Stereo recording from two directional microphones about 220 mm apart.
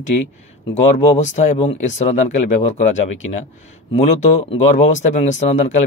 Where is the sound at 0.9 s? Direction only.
35° left (ahead or behind).